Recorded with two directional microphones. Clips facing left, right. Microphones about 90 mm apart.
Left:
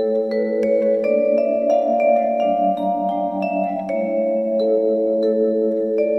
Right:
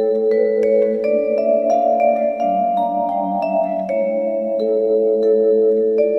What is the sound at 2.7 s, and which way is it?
Music, 15° right (ahead or behind).